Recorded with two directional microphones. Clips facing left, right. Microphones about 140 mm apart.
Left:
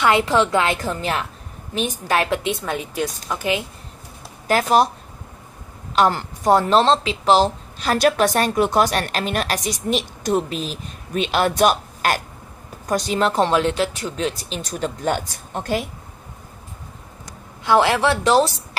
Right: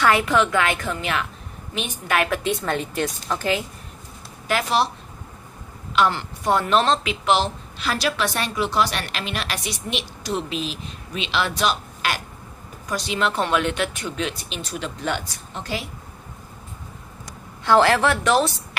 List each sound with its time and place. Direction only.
0.2 s a woman's voice: 30° left (ahead or behind)
2.6 s a woman's voice: 5° left (ahead or behind)
4.5 s speech: 40° left (ahead or behind)
5.9 s speech: 40° left (ahead or behind)
17.6 s a woman's voice: 15° left (ahead or behind)
18.1 s a woman's voice: 30° left (ahead or behind)